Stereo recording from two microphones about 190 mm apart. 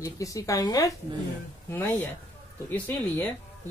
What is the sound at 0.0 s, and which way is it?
Speech, 15° left (ahead or behind).